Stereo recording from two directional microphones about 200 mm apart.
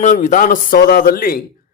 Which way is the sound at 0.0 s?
40° left (ahead or behind).